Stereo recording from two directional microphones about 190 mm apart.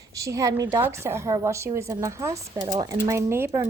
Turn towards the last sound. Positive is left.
turn(degrees=-15)  # may be behind; listen again after turning